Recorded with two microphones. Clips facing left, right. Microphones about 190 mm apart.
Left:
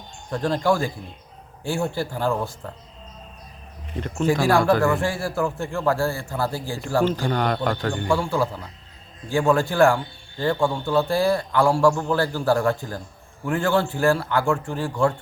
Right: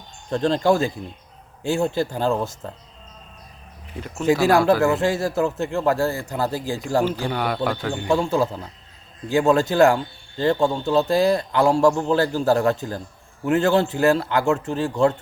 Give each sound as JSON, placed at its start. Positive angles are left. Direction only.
{"t": 0.3, "sound": "speech", "side_deg": -25}
{"t": 3.9, "sound": "speech", "side_deg": -5}
{"t": 4.4, "sound": "speech", "side_deg": -20}
{"t": 8.0, "sound": "speech", "side_deg": -20}